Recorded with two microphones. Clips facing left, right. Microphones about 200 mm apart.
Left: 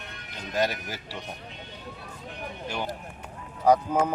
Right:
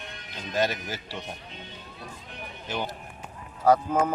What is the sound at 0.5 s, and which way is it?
Speech, 15° left (ahead or behind).